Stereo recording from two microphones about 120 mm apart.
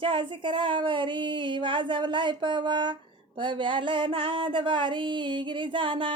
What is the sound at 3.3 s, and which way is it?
Female singing, 40° right (ahead or behind).